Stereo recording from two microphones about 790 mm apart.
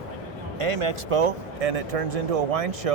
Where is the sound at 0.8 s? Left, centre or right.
Right.